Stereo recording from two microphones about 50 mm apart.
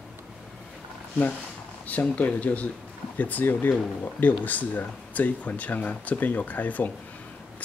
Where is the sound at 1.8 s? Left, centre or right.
Left.